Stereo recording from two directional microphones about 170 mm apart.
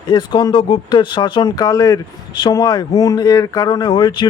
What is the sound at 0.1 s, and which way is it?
Speech, 25° left (ahead or behind).